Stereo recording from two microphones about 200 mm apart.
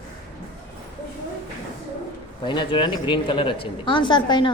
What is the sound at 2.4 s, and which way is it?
Speech, 25° left (ahead or behind).